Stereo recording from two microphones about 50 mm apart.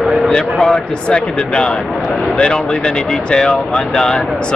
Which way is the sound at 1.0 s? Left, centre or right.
Centre.